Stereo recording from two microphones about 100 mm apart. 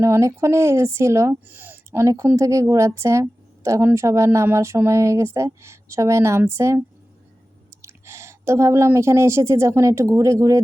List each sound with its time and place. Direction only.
0.0 s a woman's voice: 30° right (ahead or behind)